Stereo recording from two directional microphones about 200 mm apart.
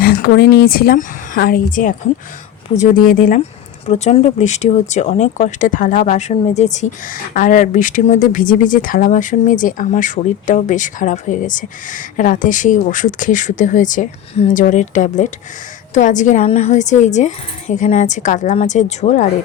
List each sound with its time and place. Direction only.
0.0 s a woman's voice: 50° left (ahead or behind)